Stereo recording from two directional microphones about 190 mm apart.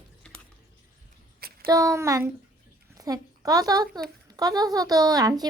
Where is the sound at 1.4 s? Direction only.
55° right (ahead or behind).